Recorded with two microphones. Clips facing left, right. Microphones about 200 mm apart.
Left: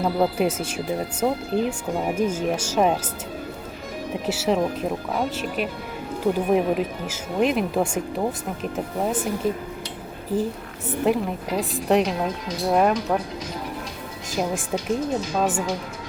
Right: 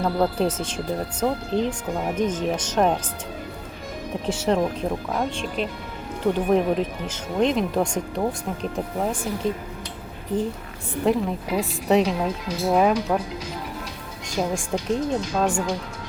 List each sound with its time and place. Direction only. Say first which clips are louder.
0.0 s speech: left 1 dB; 10° left (ahead or behind)
4.3 s a woman's voice: even; 5° left (ahead or behind)
11.0 s a woman's voice: even; centre (ahead or behind)
14.3 s a woman's voice: even; 5° left (ahead or behind)